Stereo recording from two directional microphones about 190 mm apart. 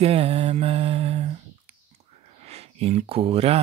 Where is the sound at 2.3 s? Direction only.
35° right (ahead or behind).